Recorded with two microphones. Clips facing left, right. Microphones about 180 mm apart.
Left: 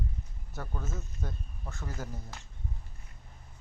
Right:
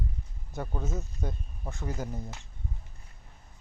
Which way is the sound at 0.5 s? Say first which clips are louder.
Right 5 dB; 20° right (ahead or behind).